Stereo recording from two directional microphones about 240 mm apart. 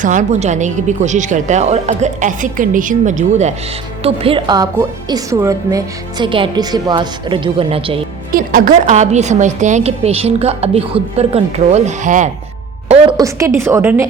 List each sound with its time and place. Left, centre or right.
0.0 s a woman's voice: right
8.3 s a woman's voice: right
12.9 s a woman's voice: centre